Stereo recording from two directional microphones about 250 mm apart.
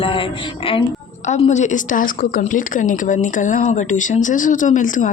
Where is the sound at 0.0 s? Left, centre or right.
Left.